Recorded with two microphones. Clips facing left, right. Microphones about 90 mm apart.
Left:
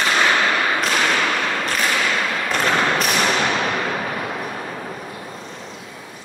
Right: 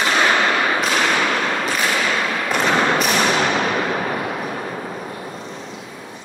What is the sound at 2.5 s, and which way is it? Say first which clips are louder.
Thump: right 2 dB; centre (ahead or behind).